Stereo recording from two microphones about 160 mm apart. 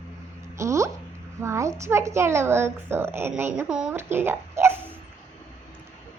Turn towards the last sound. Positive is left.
turn(degrees=-15)  # may be behind; listen again after turning